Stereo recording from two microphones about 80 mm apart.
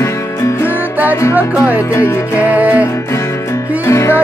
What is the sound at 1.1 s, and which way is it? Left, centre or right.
Music, left.